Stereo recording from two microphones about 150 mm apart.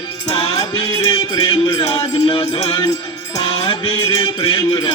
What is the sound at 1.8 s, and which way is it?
Music, 40° left (ahead or behind).